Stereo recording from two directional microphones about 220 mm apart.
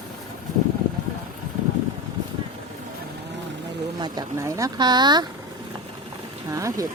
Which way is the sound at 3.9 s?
20° right (ahead or behind).